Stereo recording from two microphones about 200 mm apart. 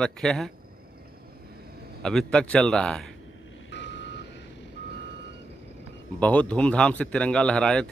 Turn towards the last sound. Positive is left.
turn(degrees=5)  # may be behind; listen again after turning